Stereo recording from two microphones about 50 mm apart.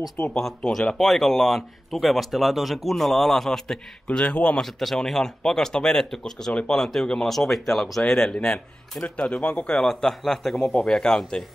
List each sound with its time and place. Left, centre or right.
0.2 s speech: left
0.9 s speech: centre
4.6 s speech: centre
9.0 s speech: left